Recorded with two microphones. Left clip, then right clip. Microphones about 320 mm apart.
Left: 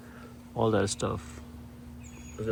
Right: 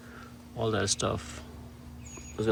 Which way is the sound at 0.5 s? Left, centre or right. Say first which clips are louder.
Left 2 dB; centre.